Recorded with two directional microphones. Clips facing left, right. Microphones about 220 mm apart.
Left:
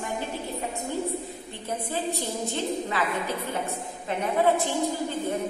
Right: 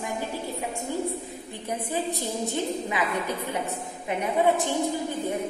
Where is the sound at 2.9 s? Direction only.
15° right (ahead or behind).